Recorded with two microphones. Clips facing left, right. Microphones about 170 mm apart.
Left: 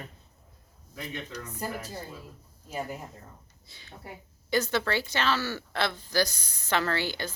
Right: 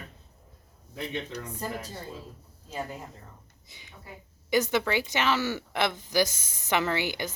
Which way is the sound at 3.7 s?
15° right (ahead or behind).